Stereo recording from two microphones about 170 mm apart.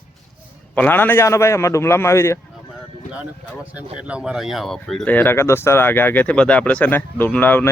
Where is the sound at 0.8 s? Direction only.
10° left (ahead or behind).